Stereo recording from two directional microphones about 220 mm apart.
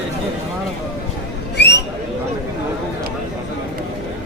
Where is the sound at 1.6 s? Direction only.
50° left (ahead or behind).